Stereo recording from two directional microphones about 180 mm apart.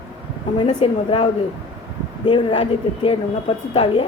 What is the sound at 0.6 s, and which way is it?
Speech, 25° left (ahead or behind).